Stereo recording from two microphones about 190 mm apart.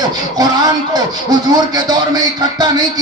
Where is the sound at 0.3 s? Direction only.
20° right (ahead or behind).